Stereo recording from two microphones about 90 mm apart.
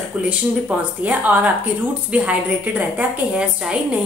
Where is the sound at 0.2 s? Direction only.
15° right (ahead or behind).